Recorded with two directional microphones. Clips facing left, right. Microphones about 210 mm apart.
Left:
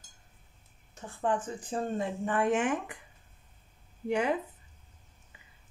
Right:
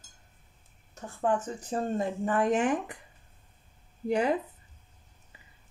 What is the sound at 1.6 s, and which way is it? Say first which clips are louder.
Speech: right 2 dB; 40° right (ahead or behind).